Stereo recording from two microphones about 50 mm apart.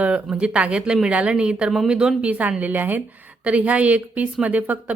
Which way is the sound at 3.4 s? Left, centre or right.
Right.